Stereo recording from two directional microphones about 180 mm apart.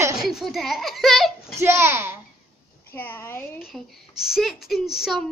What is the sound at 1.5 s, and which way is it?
Speech, 15° right (ahead or behind).